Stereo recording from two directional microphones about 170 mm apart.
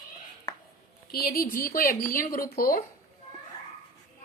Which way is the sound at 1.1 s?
60° left (ahead or behind).